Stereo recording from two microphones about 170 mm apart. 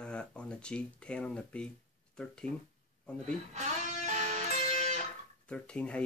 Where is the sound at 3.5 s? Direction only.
45° right (ahead or behind).